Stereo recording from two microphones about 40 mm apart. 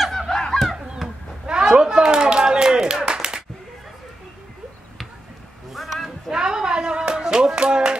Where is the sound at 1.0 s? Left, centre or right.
Right.